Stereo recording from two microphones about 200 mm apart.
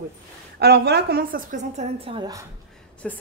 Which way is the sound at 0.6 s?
55° right (ahead or behind).